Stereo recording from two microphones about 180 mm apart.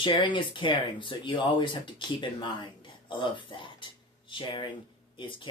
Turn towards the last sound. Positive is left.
turn(degrees=25)  # may be behind; listen again after turning